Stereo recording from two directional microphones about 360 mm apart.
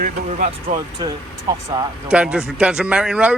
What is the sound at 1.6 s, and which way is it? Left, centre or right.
Speech, centre.